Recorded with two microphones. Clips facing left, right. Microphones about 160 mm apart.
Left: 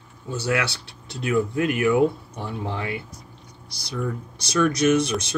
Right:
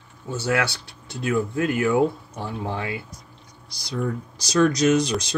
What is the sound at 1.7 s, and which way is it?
Speech, 25° right (ahead or behind).